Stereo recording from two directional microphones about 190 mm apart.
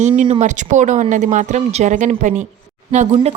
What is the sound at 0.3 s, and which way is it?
Speech, 40° right (ahead or behind).